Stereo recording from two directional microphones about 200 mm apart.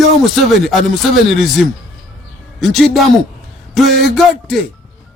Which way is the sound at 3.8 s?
Centre (ahead or behind).